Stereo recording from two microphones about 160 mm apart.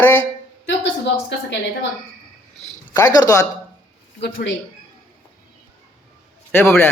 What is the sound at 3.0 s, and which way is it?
Speech, 20° left (ahead or behind).